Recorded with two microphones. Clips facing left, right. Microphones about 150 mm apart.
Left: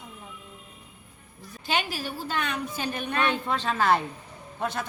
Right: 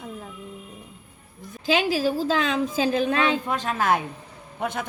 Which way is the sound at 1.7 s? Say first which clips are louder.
Right 8 dB; 90° right.